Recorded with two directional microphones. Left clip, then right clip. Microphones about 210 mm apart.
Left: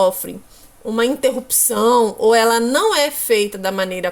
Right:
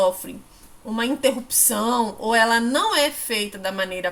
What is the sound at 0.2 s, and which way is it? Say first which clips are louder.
A woman's voice: left 6 dB; 40° left (ahead or behind).